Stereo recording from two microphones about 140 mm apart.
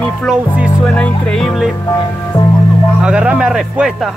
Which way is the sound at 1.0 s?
5° left (ahead or behind).